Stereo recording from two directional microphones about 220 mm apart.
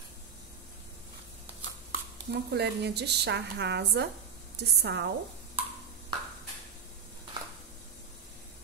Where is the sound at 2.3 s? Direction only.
50° right (ahead or behind).